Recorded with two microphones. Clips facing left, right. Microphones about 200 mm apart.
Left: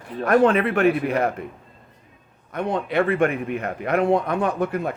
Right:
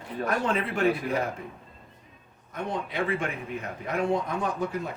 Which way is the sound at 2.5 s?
65° left (ahead or behind).